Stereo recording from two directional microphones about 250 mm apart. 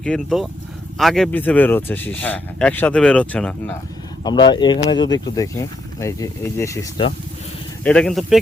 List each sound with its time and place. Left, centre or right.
0.0 s speech: centre
4.2 s speech: centre
7.9 s speech: centre